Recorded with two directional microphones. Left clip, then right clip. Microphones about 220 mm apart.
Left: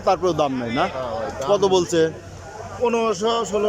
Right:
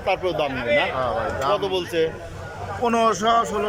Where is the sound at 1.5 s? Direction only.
20° left (ahead or behind).